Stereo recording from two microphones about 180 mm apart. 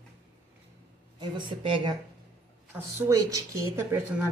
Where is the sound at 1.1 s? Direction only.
25° right (ahead or behind).